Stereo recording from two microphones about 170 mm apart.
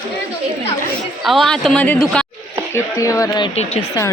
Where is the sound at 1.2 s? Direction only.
Centre (ahead or behind).